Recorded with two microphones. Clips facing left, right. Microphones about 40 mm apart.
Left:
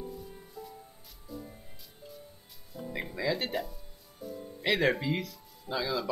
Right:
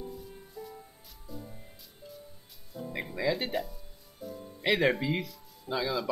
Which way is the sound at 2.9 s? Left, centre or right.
Centre.